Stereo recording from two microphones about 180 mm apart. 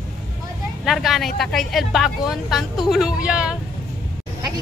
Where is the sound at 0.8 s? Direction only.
Centre (ahead or behind).